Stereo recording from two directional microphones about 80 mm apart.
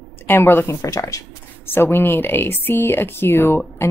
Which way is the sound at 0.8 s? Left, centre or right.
Left.